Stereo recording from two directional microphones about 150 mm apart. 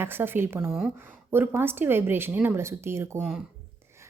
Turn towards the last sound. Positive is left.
turn(degrees=-15)  # may be behind; listen again after turning